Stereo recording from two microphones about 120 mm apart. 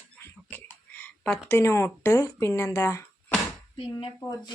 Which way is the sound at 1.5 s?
20° left (ahead or behind).